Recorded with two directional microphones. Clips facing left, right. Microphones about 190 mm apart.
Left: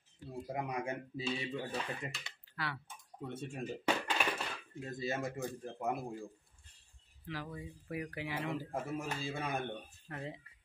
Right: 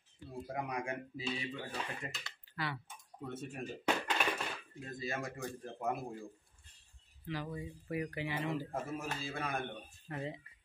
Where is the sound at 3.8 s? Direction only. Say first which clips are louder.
Even; 5° left (ahead or behind).